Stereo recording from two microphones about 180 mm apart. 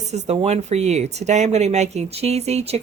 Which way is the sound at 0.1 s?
40° right (ahead or behind).